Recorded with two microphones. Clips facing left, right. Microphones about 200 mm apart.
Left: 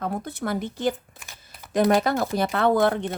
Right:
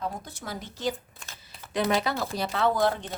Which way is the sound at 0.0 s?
60° left (ahead or behind).